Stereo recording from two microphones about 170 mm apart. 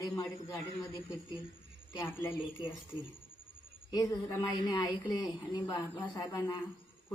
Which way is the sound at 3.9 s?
20° left (ahead or behind).